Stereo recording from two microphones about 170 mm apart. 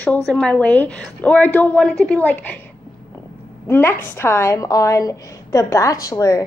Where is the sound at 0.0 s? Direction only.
5° left (ahead or behind).